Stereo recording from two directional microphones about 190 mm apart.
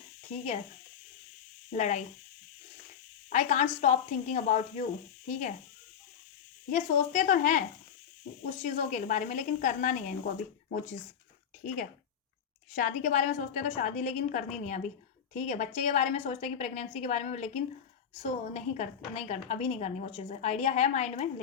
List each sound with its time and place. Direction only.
1.7 s a woman's voice: 40° left (ahead or behind)
3.2 s a woman's voice: 40° left (ahead or behind)
6.7 s a woman's voice: 40° left (ahead or behind)
8.6 s a woman's voice: 40° left (ahead or behind)
12.7 s a woman's voice: 45° left (ahead or behind)